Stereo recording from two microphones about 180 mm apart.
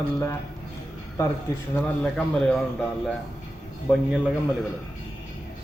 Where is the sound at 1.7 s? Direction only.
5° left (ahead or behind).